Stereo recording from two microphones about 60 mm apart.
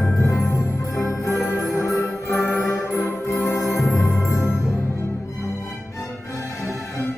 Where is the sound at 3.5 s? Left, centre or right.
Centre.